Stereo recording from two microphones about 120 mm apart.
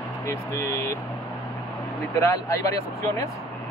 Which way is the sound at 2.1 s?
25° left (ahead or behind).